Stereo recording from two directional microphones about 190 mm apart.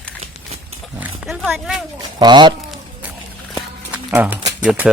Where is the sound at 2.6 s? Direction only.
Centre (ahead or behind).